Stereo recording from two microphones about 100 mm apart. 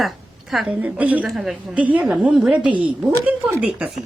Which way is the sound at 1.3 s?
Centre (ahead or behind).